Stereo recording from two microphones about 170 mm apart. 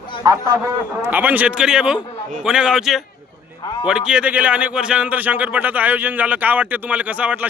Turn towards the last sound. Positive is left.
turn(degrees=-10)  # may be behind; listen again after turning